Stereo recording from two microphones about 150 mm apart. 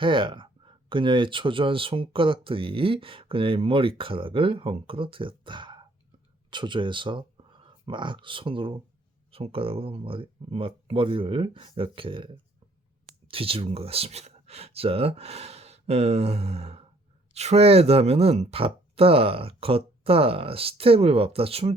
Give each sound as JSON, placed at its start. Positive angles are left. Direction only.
{"t": 0.0, "sound": "speech", "side_deg": -35}